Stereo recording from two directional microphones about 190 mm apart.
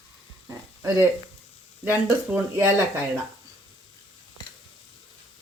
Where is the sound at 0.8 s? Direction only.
15° right (ahead or behind).